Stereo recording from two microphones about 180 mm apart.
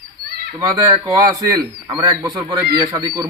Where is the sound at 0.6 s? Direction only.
20° right (ahead or behind).